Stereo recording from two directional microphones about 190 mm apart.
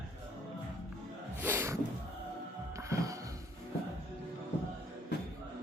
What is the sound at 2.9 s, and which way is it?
Music, 15° right (ahead or behind).